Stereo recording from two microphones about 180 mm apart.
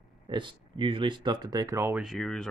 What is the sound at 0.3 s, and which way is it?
Speech, 25° right (ahead or behind).